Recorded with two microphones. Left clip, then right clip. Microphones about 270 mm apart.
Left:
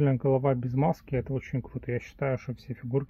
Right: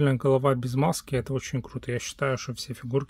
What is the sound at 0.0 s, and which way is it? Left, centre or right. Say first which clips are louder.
Speech: right 3 dB; right.